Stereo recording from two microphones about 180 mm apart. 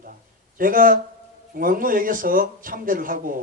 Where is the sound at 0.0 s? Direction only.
50° right (ahead or behind).